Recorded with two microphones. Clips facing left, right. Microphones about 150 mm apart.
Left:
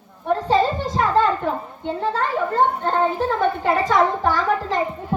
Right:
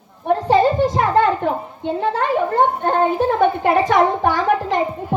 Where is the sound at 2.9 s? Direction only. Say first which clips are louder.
Right 3 dB; 15° right (ahead or behind).